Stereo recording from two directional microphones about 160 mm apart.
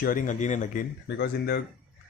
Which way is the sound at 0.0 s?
60° left (ahead or behind).